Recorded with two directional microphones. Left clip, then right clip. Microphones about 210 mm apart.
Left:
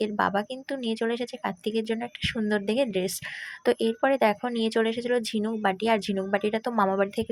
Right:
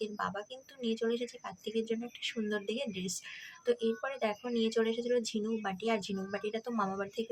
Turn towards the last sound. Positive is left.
turn(degrees=30)  # may be behind; listen again after turning